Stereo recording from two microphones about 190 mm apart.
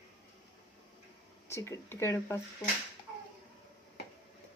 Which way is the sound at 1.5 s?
15° left (ahead or behind).